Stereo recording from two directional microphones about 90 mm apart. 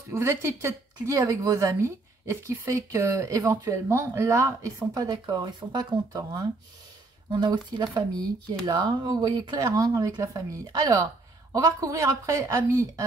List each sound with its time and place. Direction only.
0.1 s a woman's voice: 30° right (ahead or behind)